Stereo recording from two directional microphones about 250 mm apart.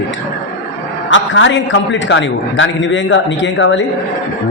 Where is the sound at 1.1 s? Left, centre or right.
Left.